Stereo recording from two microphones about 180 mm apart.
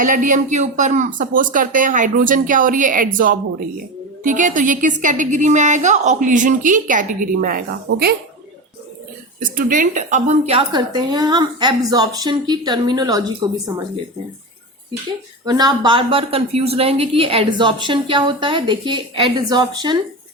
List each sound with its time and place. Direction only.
0.0 s a woman's voice: 45° right (ahead or behind)
9.4 s a woman's voice: 50° right (ahead or behind); by 13.2 s 20° right (ahead or behind)
15.4 s a woman's voice: 25° right (ahead or behind)